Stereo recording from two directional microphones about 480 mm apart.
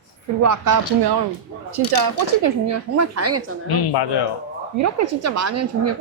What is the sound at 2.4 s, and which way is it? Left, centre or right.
A woman's voice, right.